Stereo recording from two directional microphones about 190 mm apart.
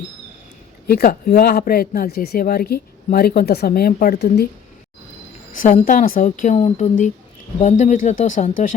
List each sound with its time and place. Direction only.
0.9 s speech: 55° left (ahead or behind)
5.5 s speech: 45° left (ahead or behind)